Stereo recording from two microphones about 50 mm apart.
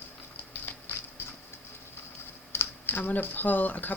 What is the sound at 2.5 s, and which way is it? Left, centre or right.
Typing, left.